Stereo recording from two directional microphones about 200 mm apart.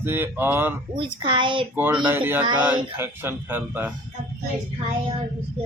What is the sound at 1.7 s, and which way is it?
Speech, 10° right (ahead or behind).